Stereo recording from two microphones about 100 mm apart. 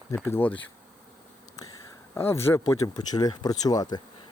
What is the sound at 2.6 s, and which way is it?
Speech, 40° left (ahead or behind).